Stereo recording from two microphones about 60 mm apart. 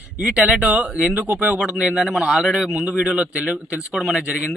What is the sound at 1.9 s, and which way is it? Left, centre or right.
Speech, centre.